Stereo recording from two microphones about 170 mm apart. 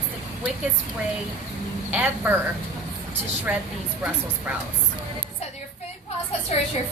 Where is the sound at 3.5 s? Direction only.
10° right (ahead or behind).